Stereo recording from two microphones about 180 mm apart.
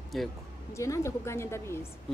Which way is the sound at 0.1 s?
Centre (ahead or behind).